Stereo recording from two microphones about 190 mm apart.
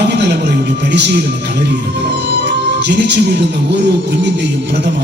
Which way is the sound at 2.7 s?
65° right (ahead or behind).